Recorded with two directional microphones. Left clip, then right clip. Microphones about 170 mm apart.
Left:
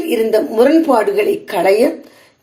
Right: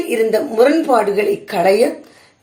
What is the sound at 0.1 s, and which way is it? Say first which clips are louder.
A woman's voice: left 2 dB; 30° left (ahead or behind).